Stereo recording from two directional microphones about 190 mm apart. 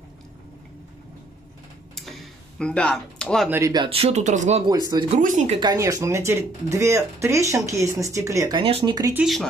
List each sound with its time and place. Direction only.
2.0 s tick-tock: centre (ahead or behind)
3.4 s speech: 15° right (ahead or behind); by 4.6 s 40° right (ahead or behind)
4.6 s speech: 20° right (ahead or behind)
5.1 s speech: 40° right (ahead or behind)
5.6 s speech: 20° right (ahead or behind)
9.1 s speech: centre (ahead or behind)